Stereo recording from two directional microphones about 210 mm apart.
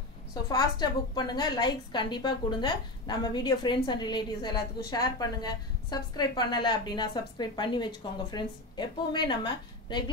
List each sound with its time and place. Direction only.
0.3 s a woman's voice: 20° left (ahead or behind)